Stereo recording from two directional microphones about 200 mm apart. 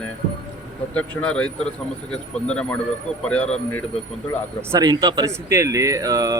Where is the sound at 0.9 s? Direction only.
5° left (ahead or behind).